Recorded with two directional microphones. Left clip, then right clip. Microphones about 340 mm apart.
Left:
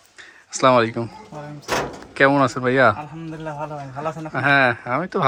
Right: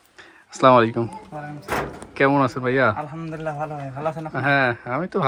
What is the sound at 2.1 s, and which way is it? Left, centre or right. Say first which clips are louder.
Speech: left 2 dB; centre.